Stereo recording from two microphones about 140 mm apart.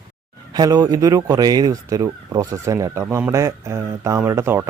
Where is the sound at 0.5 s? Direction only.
25° right (ahead or behind).